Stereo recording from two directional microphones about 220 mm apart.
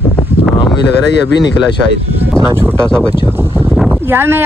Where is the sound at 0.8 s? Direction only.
50° left (ahead or behind).